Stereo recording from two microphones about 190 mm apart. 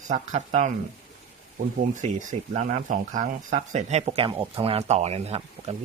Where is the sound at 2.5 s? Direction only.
35° right (ahead or behind).